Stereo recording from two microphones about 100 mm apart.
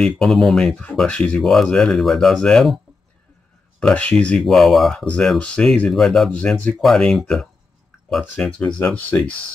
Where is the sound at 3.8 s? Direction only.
10° left (ahead or behind).